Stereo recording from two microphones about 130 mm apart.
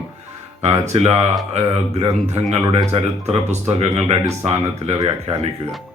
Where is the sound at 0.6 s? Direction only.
55° right (ahead or behind).